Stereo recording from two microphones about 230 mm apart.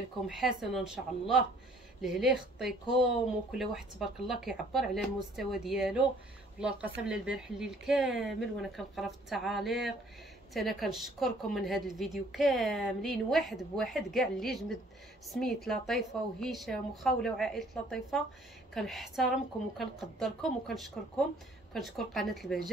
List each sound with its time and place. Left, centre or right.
0.4 s a woman's voice: centre
7.1 s a woman's voice: centre